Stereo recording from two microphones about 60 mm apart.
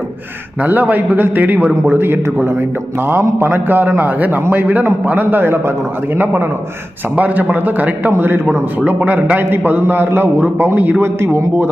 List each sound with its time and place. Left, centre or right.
0.6 s a man's voice: right
11.0 s speech: right